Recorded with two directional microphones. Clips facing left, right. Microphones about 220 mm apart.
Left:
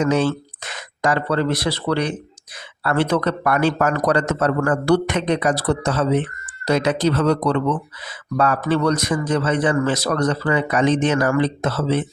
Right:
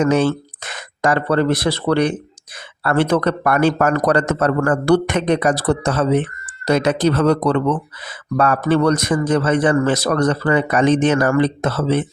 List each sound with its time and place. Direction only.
0.0 s a man's voice: 50° right (ahead or behind)